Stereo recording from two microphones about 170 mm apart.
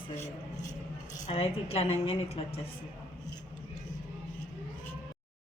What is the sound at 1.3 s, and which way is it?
A woman's voice, 35° left (ahead or behind).